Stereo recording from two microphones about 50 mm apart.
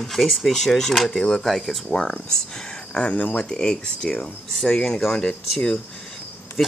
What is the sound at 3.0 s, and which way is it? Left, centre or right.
Cricket, left.